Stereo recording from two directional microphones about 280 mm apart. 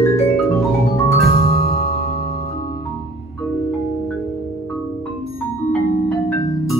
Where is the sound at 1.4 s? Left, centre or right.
Left.